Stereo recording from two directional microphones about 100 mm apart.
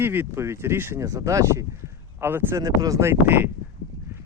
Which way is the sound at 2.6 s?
35° right (ahead or behind).